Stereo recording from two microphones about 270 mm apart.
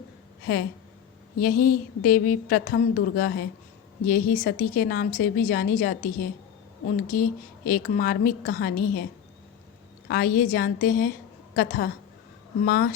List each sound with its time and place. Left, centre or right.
1.4 s a woman's voice: left
7.1 s a woman's voice: left
10.1 s a woman's voice: left